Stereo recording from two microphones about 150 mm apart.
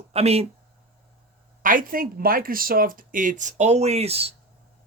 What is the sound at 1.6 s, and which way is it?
A man's voice, 65° right (ahead or behind).